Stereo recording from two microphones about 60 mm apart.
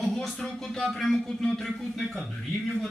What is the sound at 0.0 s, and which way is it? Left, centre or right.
Speech, centre.